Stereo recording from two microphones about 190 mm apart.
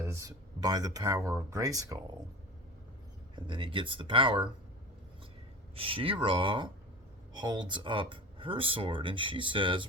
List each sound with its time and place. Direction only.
0.0 s speech: 15° right (ahead or behind)
3.3 s speech: 25° right (ahead or behind)
5.7 s speech: 30° right (ahead or behind)